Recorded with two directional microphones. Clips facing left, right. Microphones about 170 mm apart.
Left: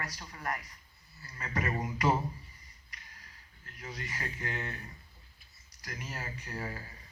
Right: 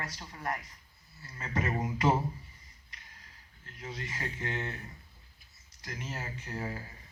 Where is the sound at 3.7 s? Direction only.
25° right (ahead or behind).